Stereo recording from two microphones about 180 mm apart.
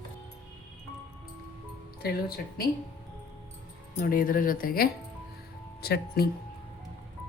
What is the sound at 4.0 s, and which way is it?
A woman's voice, 50° left (ahead or behind).